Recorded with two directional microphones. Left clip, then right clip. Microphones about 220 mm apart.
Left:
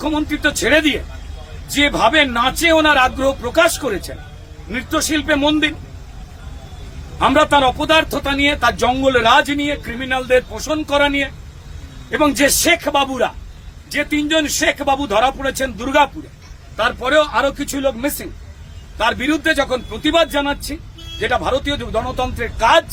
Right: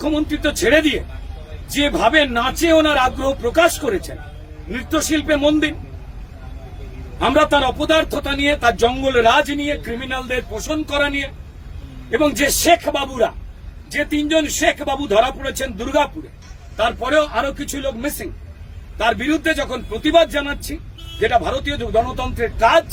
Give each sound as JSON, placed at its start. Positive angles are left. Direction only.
{"t": 0.0, "sound": "a man's voice", "side_deg": 20}
{"t": 7.2, "sound": "a man's voice", "side_deg": 20}